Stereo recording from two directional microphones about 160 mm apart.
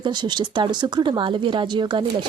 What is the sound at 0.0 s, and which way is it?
Speech, 25° right (ahead or behind).